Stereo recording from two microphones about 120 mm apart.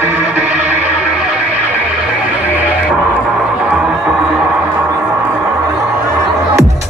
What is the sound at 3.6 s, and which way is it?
Music, 5° right (ahead or behind).